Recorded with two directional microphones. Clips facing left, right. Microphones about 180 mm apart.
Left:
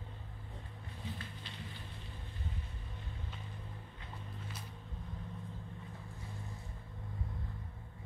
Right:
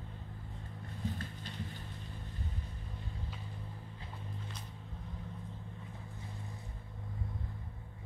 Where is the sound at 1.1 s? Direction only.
45° right (ahead or behind).